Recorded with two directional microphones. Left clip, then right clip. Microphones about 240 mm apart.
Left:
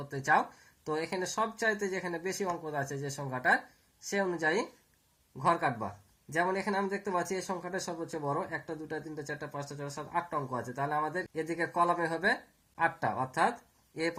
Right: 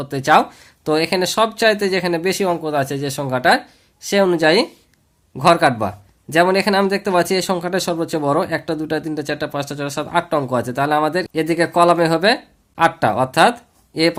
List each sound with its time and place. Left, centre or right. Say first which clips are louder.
0.1 s speech: right 14 dB; right
9.9 s speech: right 15 dB; right